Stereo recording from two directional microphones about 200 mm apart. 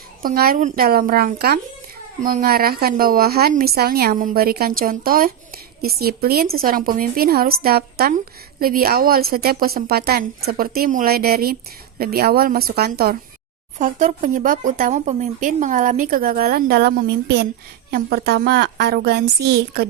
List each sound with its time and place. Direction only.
0.2 s a woman's voice: 50° right (ahead or behind)
13.7 s a woman's voice: 40° right (ahead or behind)